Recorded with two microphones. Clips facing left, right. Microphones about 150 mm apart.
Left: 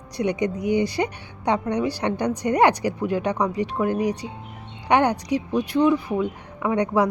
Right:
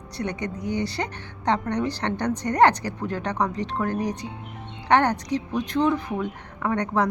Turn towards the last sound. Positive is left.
turn(degrees=10)  # may be behind; listen again after turning